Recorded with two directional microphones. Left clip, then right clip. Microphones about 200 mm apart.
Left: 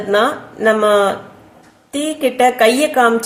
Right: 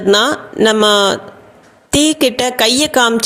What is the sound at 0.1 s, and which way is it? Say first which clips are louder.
Speech: right 3 dB; 50° right (ahead or behind).